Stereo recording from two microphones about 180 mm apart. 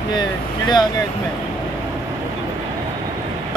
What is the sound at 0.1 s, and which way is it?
Speech, 25° left (ahead or behind).